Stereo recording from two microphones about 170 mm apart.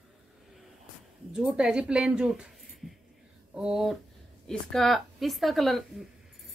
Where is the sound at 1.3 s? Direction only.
5° right (ahead or behind).